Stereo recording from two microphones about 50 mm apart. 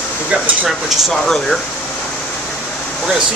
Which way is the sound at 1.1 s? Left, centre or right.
Centre.